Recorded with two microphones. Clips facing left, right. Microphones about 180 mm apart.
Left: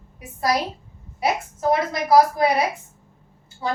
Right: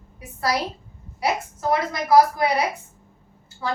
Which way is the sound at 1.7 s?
20° left (ahead or behind).